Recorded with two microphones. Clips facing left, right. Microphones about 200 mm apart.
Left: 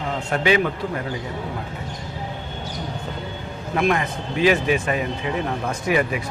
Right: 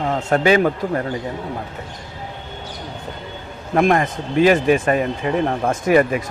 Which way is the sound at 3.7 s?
45° right (ahead or behind).